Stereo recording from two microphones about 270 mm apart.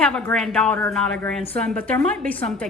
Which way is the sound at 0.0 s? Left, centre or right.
Centre.